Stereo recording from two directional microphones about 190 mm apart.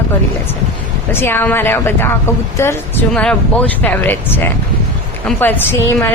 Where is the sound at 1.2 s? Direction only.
10° left (ahead or behind).